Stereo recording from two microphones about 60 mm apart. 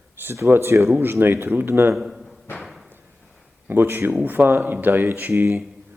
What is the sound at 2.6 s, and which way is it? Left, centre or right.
Thump, centre.